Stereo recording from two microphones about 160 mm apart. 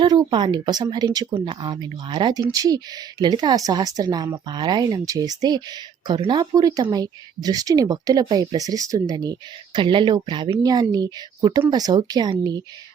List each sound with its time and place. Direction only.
0.0 s speech: 25° right (ahead or behind)